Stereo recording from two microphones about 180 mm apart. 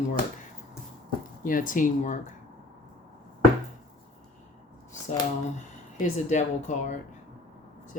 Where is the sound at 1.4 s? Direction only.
50° left (ahead or behind).